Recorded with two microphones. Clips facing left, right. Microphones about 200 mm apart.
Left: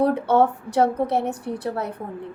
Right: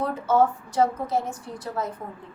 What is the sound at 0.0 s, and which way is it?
A woman's voice, 65° left (ahead or behind).